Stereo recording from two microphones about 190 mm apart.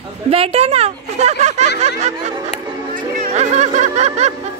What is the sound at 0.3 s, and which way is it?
A woman's voice, 30° right (ahead or behind).